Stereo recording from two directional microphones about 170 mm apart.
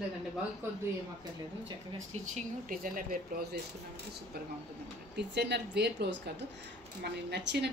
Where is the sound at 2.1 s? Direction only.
45° right (ahead or behind).